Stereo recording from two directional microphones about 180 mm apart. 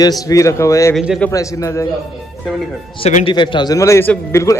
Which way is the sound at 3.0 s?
30° left (ahead or behind).